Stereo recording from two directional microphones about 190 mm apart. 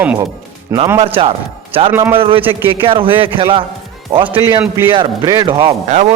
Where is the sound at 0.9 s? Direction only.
30° right (ahead or behind).